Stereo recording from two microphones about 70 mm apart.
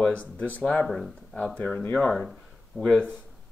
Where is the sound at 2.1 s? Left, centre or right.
Centre.